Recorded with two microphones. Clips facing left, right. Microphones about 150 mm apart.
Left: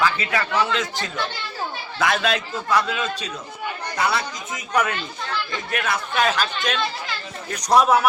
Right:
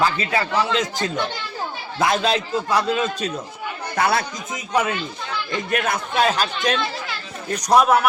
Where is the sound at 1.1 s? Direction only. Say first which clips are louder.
Right 3 dB; 20° right (ahead or behind).